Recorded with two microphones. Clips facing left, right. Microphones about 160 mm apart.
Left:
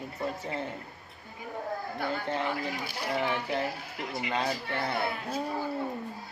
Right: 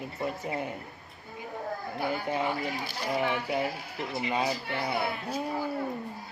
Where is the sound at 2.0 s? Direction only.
10° right (ahead or behind).